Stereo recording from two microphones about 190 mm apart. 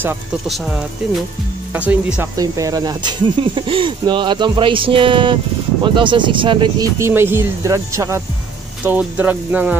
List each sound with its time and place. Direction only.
0.5 s speech: centre (ahead or behind)
2.3 s speech: 20° right (ahead or behind)
7.0 s speech: 10° right (ahead or behind)